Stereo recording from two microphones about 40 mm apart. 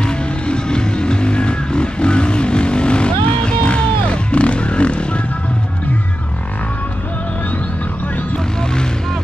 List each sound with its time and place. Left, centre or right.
0.0 s vehicle: left